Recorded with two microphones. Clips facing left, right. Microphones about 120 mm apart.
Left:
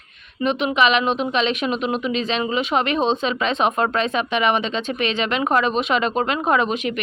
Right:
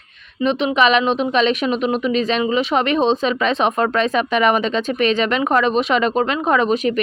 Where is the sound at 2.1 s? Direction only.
45° right (ahead or behind).